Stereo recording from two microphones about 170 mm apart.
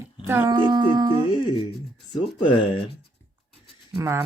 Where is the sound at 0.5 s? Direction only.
25° right (ahead or behind).